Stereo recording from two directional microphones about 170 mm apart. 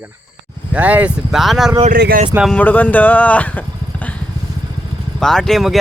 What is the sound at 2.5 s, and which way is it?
Speech, 10° left (ahead or behind).